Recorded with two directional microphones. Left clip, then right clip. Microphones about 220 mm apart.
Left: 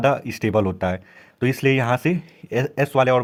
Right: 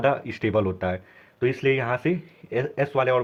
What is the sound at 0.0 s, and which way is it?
Speech, 30° left (ahead or behind).